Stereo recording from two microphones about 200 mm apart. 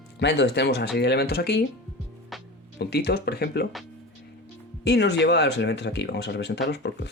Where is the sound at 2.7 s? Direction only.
55° left (ahead or behind).